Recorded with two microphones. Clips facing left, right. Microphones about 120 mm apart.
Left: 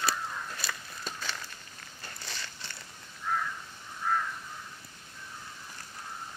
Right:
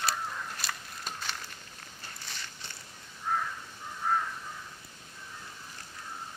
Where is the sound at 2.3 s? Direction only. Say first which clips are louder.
Left 3 dB; 90° left.